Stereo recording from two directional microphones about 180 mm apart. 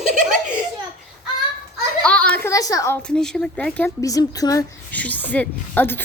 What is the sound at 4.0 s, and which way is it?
Speech, 20° left (ahead or behind).